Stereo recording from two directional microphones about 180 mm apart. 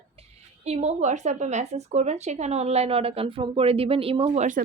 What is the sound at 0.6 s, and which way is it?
A woman's voice, 35° right (ahead or behind).